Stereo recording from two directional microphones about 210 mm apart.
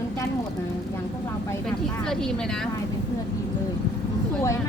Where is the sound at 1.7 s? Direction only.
5° left (ahead or behind).